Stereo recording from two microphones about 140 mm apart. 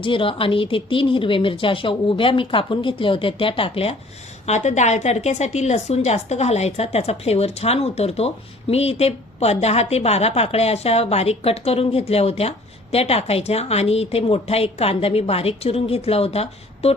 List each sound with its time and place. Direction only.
0.0 s speech: 40° left (ahead or behind)
4.4 s a woman's voice: 55° left (ahead or behind)